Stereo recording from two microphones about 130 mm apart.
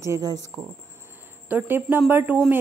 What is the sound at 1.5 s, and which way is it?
Speech, 15° right (ahead or behind).